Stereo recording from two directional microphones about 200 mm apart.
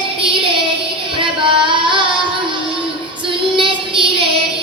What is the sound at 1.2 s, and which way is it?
Singing, 25° right (ahead or behind).